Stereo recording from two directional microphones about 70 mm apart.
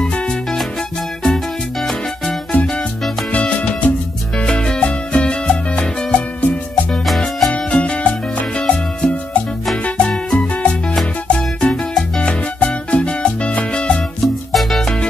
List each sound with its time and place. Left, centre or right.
0.0 s music: centre
3.3 s salsa music: centre
4.4 s music: centre
7.1 s music: centre
7.5 s music: centre
14.2 s music: centre